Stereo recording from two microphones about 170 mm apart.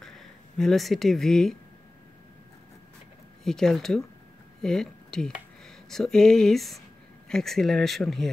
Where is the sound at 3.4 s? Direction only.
5° left (ahead or behind).